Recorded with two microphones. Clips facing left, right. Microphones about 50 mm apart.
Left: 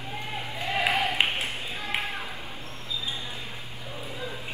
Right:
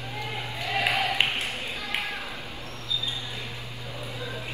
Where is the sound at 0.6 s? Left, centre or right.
Left.